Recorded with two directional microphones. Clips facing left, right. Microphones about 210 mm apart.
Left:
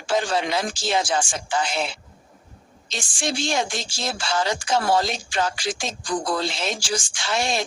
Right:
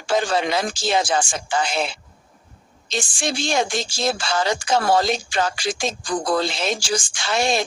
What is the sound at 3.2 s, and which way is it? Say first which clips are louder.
Speech: right 1 dB; 90° right.